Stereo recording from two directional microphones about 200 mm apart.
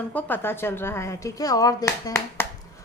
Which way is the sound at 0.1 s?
10° left (ahead or behind).